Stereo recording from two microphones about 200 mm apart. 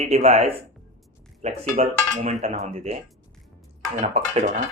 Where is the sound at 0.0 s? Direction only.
35° right (ahead or behind).